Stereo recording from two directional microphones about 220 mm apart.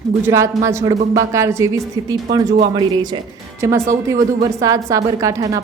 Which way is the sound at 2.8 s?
20° right (ahead or behind).